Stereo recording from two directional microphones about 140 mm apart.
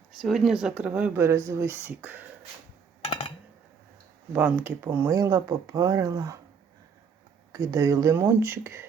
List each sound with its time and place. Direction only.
0.1 s speech: centre (ahead or behind)
4.3 s speech: 10° right (ahead or behind)
7.5 s speech: 25° right (ahead or behind)